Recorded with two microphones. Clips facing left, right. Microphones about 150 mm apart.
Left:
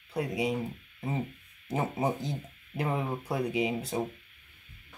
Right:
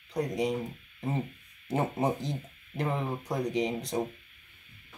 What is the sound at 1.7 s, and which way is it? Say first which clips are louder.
Speech: right 1 dB; centre (ahead or behind).